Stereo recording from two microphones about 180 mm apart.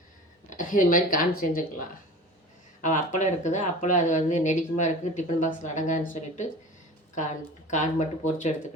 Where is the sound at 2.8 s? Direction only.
45° left (ahead or behind).